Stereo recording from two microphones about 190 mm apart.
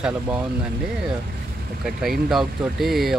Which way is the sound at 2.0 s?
Centre (ahead or behind).